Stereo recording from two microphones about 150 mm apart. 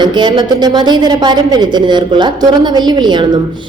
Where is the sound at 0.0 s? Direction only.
30° right (ahead or behind).